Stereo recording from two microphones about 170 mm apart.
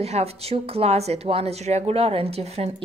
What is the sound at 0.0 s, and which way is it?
A woman's voice, 40° right (ahead or behind).